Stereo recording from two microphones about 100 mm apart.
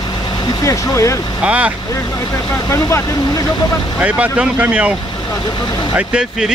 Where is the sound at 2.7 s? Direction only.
30° left (ahead or behind).